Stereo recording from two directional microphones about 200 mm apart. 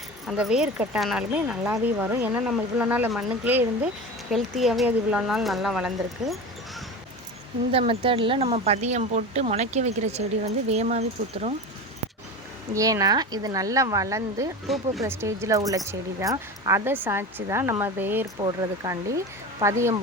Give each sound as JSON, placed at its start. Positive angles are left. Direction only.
{"t": 0.3, "sound": "speech", "side_deg": 0}
{"t": 7.7, "sound": "speech", "side_deg": -30}
{"t": 12.7, "sound": "speech", "side_deg": -15}
{"t": 14.7, "sound": "speech", "side_deg": 0}
{"t": 15.0, "sound": "speech", "side_deg": -15}